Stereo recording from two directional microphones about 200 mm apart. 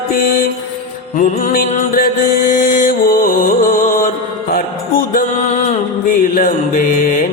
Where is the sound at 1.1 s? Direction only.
40° left (ahead or behind).